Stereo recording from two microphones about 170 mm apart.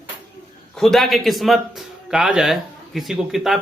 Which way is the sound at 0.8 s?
Centre (ahead or behind).